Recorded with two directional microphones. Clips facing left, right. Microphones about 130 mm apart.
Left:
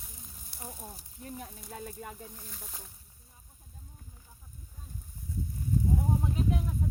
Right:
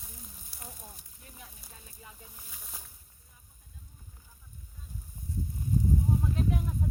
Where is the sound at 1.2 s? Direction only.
35° left (ahead or behind).